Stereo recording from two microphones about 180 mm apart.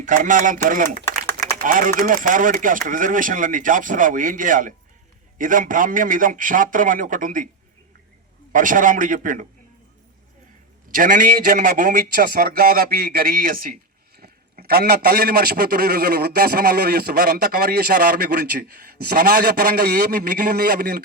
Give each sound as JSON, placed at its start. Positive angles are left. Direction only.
{"t": 0.0, "sound": "speech", "side_deg": -45}
{"t": 8.5, "sound": "speech", "side_deg": -50}
{"t": 10.9, "sound": "a man's voice", "side_deg": -50}